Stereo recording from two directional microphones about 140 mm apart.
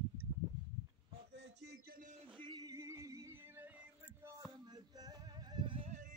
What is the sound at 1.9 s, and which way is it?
Speech, 75° right (ahead or behind).